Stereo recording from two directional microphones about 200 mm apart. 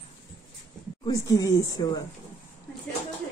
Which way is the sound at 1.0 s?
20° left (ahead or behind).